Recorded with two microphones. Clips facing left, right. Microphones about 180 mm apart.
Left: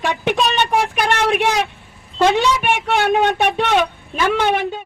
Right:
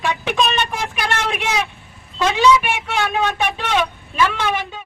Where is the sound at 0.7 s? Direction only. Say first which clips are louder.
Left 6 dB; 60° left (ahead or behind).